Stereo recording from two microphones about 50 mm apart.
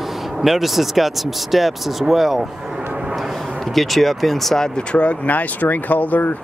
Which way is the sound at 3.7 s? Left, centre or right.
Centre.